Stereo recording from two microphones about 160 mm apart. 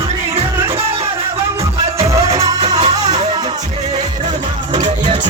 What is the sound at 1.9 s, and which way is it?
Music, 40° right (ahead or behind).